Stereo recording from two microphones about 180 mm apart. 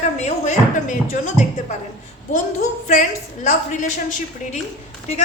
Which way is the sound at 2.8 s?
45° left (ahead or behind).